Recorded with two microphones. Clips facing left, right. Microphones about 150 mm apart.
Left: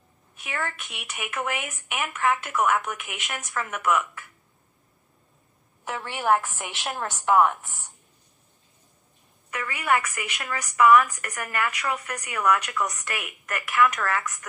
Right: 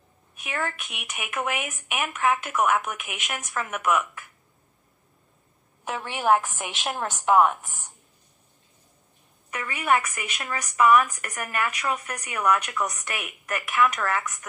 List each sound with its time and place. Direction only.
0.4 s a woman's voice: 20° right (ahead or behind)
5.9 s a woman's voice: 15° right (ahead or behind)
9.5 s a woman's voice: 20° right (ahead or behind)